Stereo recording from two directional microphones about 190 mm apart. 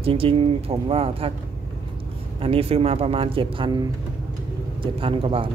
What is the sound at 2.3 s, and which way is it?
Speech, 30° right (ahead or behind).